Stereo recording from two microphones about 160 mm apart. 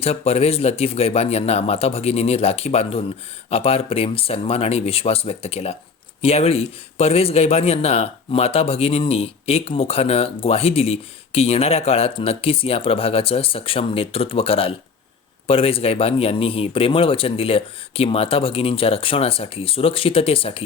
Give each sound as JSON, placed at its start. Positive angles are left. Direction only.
{"t": 0.0, "sound": "a man's voice", "side_deg": 40}